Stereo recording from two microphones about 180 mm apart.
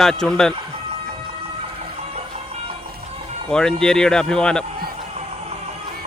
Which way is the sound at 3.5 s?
5° left (ahead or behind).